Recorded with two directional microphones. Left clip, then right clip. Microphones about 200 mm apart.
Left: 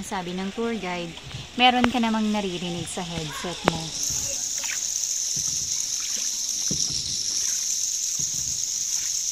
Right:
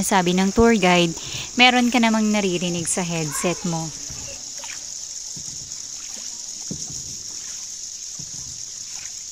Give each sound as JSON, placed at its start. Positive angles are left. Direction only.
{"t": 0.1, "sound": "speech", "side_deg": -35}
{"t": 1.6, "sound": "speech", "side_deg": -20}